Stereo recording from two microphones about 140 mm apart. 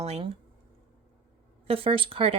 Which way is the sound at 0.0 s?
50° right (ahead or behind).